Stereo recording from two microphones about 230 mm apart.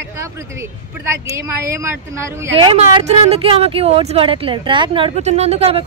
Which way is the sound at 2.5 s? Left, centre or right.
Right.